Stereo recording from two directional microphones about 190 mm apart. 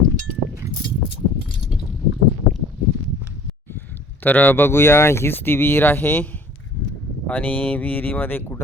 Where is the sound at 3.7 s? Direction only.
10° left (ahead or behind).